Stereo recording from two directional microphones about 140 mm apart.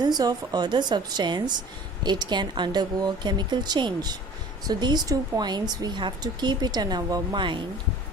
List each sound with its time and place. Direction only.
0.2 s a woman's voice: 30° right (ahead or behind)